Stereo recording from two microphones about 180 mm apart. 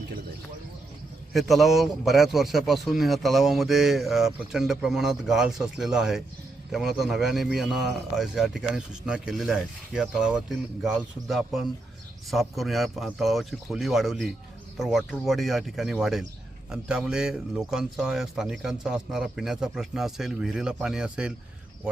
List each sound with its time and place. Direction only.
1.3 s a man's voice: centre (ahead or behind)